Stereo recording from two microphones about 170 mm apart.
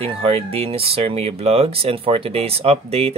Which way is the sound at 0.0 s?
35° right (ahead or behind).